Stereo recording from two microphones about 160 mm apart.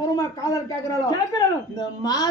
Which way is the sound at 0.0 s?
20° left (ahead or behind).